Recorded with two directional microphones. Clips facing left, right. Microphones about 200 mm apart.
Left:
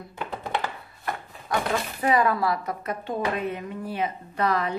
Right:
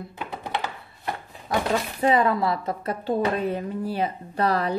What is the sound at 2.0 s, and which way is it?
A woman's voice, 25° right (ahead or behind).